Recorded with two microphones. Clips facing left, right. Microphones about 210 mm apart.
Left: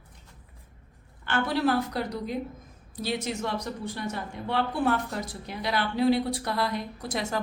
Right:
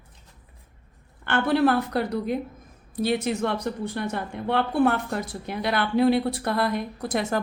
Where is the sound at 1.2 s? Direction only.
60° right (ahead or behind).